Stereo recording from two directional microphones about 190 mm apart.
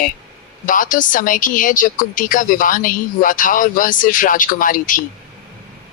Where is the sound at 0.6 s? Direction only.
45° left (ahead or behind).